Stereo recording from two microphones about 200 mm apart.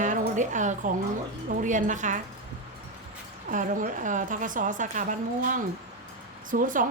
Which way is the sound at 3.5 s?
40° right (ahead or behind).